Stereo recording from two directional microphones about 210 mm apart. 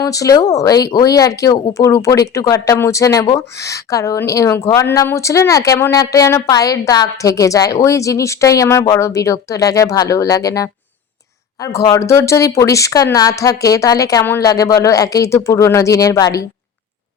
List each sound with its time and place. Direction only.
0.0 s speech: 15° left (ahead or behind)